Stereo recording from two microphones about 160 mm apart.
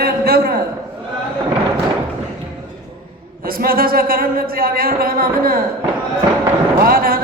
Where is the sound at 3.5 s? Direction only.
65° right (ahead or behind).